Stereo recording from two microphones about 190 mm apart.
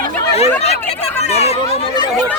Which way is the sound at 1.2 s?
35° left (ahead or behind).